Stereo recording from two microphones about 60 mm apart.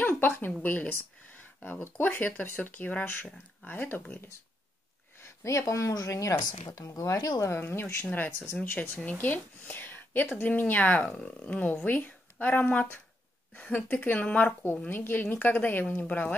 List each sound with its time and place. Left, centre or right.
0.0 s a sound: left
0.6 s a woman's voice: left
5.2 s speech: left
7.5 s speech: left
8.0 s a woman's voice: left